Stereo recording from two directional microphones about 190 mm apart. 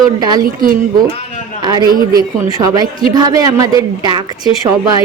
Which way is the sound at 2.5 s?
20° right (ahead or behind).